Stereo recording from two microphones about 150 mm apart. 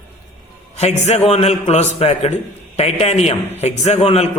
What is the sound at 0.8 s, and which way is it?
A man's voice, 45° left (ahead or behind).